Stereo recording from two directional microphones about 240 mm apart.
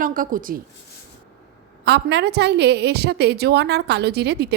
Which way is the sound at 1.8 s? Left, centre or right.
Right.